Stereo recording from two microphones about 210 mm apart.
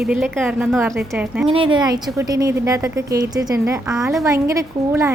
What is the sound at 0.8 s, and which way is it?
Speech, 15° right (ahead or behind).